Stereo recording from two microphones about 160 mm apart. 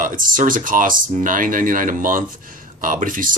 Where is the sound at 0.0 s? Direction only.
60° right (ahead or behind).